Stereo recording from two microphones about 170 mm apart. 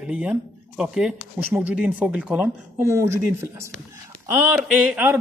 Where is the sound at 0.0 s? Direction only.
5° right (ahead or behind).